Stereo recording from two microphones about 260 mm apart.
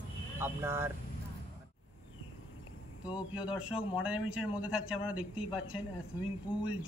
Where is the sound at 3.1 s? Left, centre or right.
Centre.